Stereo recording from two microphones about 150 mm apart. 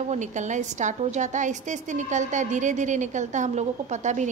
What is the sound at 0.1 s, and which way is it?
A woman's voice, 55° right (ahead or behind).